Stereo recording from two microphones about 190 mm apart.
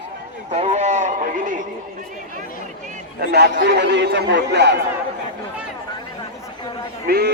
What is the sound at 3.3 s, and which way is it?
Speech, 60° right (ahead or behind).